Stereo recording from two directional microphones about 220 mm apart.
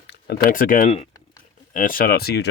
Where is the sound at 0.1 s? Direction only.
45° left (ahead or behind).